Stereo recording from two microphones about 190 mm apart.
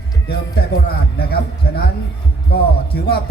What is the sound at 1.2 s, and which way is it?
Speech, 55° left (ahead or behind).